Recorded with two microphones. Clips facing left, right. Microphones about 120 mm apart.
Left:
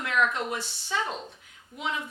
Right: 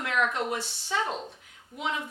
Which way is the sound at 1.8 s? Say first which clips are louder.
Right 1 dB; 50° right (ahead or behind).